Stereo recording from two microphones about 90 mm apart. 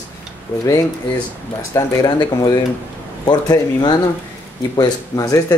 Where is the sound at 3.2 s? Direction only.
55° left (ahead or behind).